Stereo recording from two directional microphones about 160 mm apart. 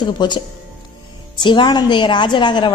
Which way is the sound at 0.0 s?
30° left (ahead or behind).